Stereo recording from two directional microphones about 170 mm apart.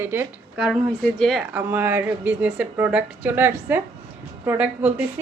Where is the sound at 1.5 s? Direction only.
10° right (ahead or behind).